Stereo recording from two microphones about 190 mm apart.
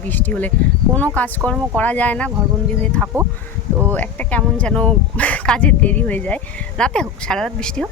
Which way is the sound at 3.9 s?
10° left (ahead or behind).